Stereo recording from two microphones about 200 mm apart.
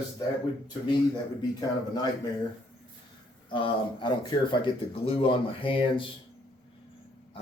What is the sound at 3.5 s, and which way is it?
Speech, 25° left (ahead or behind).